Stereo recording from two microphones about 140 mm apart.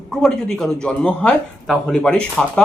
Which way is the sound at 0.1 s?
5° left (ahead or behind).